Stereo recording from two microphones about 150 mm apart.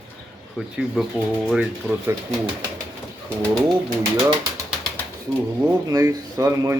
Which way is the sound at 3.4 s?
5° left (ahead or behind).